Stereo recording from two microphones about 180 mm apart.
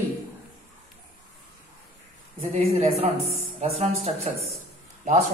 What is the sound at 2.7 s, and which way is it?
A man's voice, 35° right (ahead or behind).